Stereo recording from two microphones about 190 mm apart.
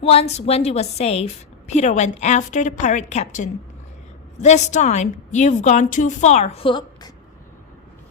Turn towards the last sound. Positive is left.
turn(degrees=25)  # may be behind; listen again after turning